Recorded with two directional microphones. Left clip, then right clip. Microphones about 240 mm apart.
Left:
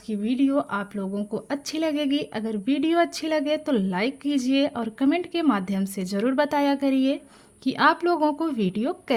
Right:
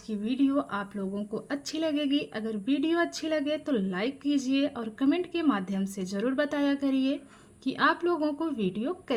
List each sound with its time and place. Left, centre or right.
0.1 s a woman's voice: left